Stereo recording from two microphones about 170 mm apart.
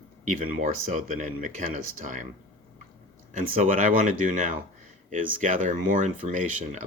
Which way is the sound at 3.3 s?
50° right (ahead or behind).